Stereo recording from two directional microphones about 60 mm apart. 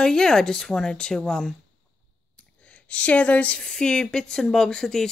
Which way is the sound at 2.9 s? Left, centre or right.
Left.